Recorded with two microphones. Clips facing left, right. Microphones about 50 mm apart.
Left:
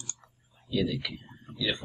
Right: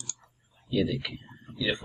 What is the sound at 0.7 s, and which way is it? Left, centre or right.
Speech, centre.